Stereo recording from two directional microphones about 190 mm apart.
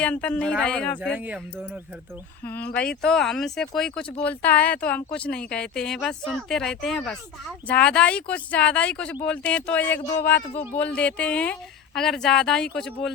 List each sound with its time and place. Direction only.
0.0 s speech: 5° left (ahead or behind)
1.1 s speech: 10° right (ahead or behind)
2.4 s speech: 10° left (ahead or behind)
2.8 s speech: 50° left (ahead or behind)
3.1 s speech: centre (ahead or behind)
10.5 s speech: 30° left (ahead or behind)
10.8 s speech: 5° left (ahead or behind)